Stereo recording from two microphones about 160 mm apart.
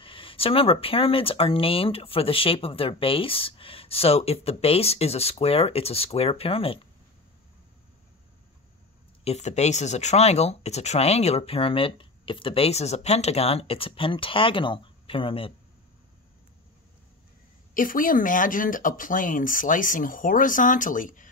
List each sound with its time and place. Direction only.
0.0 s speech: 35° left (ahead or behind)
9.2 s speech: 45° left (ahead or behind)
17.7 s speech: 60° left (ahead or behind)